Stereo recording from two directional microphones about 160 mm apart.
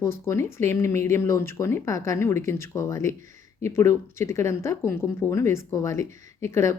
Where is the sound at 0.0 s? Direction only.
15° left (ahead or behind).